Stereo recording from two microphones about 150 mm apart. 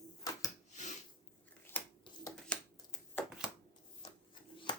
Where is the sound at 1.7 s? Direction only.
15° left (ahead or behind).